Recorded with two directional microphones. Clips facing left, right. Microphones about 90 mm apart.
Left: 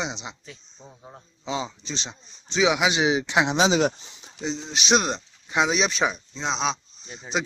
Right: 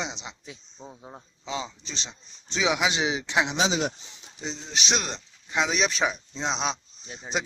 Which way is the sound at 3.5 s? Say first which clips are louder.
Left 5 dB; 60° left (ahead or behind).